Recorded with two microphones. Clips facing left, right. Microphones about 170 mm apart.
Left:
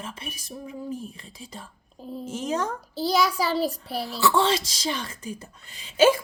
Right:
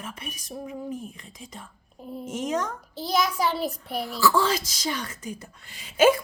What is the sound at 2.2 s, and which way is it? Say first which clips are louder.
A child's voice: even; 30° left (ahead or behind).